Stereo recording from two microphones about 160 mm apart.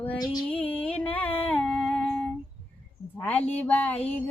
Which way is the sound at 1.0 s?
10° left (ahead or behind).